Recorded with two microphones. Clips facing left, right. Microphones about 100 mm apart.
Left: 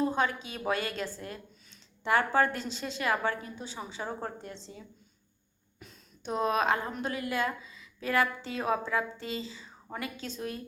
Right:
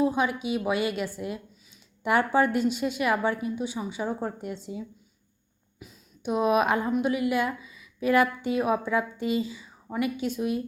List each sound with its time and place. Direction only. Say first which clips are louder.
0.0 s a woman's voice: right 4 dB; 10° right (ahead or behind)